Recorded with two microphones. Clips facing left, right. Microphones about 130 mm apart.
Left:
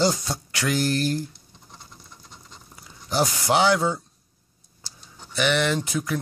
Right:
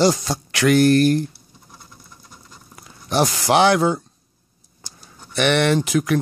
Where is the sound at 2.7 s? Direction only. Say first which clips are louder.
Right 4 dB; 75° right (ahead or behind).